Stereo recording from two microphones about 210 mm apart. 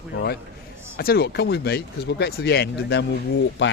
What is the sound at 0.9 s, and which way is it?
Speech, 45° left (ahead or behind).